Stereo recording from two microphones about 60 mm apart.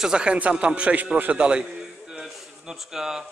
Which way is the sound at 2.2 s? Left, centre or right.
Centre.